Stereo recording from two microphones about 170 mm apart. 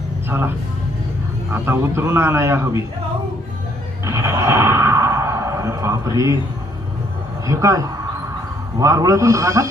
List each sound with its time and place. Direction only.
0.3 s a man's voice: 15° right (ahead or behind)
1.5 s a man's voice: 15° right (ahead or behind)
4.0 s a sound: 15° right (ahead or behind)
7.4 s a man's voice: 20° right (ahead or behind)